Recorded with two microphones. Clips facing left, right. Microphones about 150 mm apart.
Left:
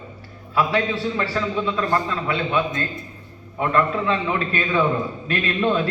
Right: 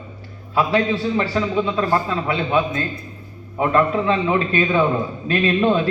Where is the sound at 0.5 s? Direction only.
25° right (ahead or behind).